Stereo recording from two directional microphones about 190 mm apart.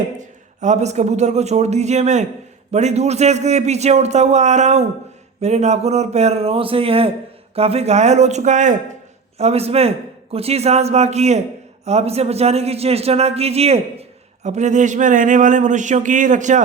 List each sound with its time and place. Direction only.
0.2 s a man's voice: 40° right (ahead or behind)